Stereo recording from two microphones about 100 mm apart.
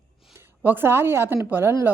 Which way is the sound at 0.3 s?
20° right (ahead or behind).